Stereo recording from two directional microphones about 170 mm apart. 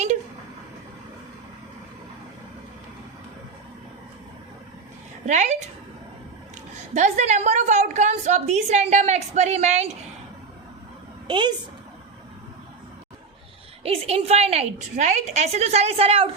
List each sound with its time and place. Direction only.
5.2 s a woman's voice: 45° right (ahead or behind)
6.9 s a woman's voice: 45° right (ahead or behind)
11.3 s a woman's voice: 30° right (ahead or behind)
13.8 s a woman's voice: 35° right (ahead or behind)